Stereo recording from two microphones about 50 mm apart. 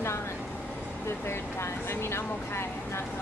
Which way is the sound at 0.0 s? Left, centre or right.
Left.